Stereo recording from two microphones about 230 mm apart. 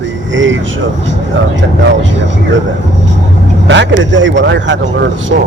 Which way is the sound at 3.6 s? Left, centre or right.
Right.